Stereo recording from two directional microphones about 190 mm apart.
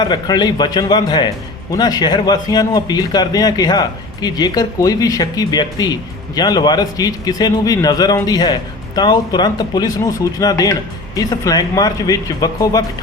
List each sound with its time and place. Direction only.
0.0 s a man's voice: 20° left (ahead or behind)